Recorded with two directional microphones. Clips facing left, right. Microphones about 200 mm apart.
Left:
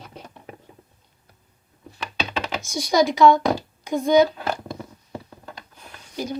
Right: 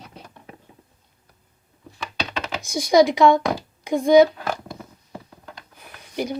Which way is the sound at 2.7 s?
55° right (ahead or behind).